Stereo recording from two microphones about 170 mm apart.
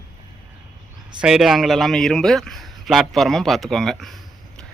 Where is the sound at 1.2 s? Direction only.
Centre (ahead or behind).